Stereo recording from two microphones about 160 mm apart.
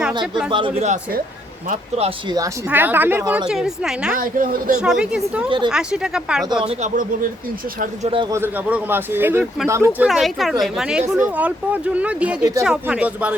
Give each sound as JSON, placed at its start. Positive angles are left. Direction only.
{"t": 0.5, "sound": "speech", "side_deg": -30}
{"t": 2.6, "sound": "a woman's voice", "side_deg": -10}
{"t": 4.2, "sound": "speech", "side_deg": -60}
{"t": 4.8, "sound": "speech", "side_deg": -5}
{"t": 6.6, "sound": "speech", "side_deg": -40}
{"t": 8.0, "sound": "speech", "side_deg": -35}
{"t": 8.3, "sound": "a woman's voice", "side_deg": -15}
{"t": 10.1, "sound": "a woman's voice", "side_deg": 0}